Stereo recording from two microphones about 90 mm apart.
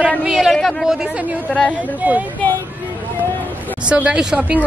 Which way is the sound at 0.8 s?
5° right (ahead or behind).